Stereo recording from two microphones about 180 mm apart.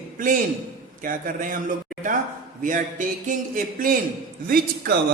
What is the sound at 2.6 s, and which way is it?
A man's voice, 45° right (ahead or behind).